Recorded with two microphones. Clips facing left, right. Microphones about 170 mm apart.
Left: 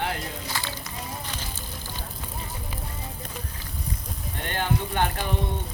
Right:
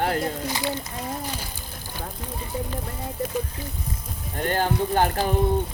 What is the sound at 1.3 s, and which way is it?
Music, 15° right (ahead or behind).